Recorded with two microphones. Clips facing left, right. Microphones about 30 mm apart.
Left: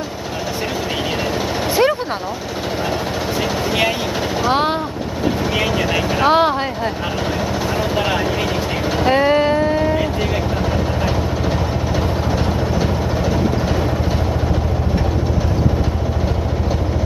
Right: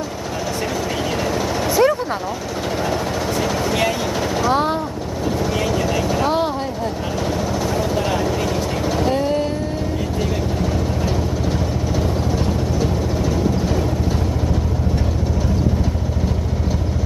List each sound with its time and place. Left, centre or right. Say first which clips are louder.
1.7 s vehicle: even; left
4.5 s vehicle: left 2 dB; left
7.7 s vehicle: left 3 dB; left
9.1 s vehicle: left 5 dB; left
10.6 s vehicle: left 2 dB; centre